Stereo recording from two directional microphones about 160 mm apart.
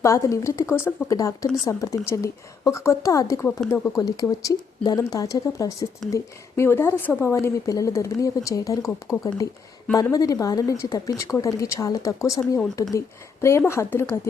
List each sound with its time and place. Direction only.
0.0 s a woman's voice: 20° left (ahead or behind)